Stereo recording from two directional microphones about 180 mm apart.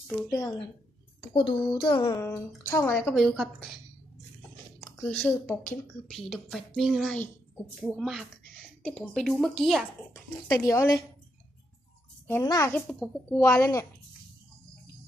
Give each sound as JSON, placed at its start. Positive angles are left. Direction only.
{"t": 1.3, "sound": "a child's voice", "side_deg": 30}
{"t": 3.1, "sound": "a woman's voice", "side_deg": 0}
{"t": 5.0, "sound": "a woman's voice", "side_deg": 5}
{"t": 10.6, "sound": "a woman's voice", "side_deg": 15}
{"t": 12.3, "sound": "a woman's voice", "side_deg": 15}
{"t": 12.8, "sound": "a woman's voice", "side_deg": 0}
{"t": 13.4, "sound": "a woman's voice", "side_deg": 15}